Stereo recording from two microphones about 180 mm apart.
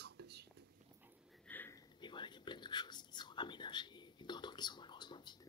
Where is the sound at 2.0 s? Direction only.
25° left (ahead or behind).